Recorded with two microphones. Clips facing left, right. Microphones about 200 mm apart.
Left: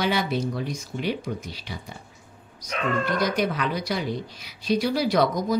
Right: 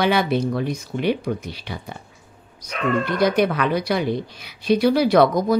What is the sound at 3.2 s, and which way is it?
A woman's voice, 60° right (ahead or behind).